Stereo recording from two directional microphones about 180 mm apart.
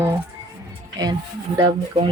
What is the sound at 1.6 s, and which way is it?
Speech, 30° right (ahead or behind).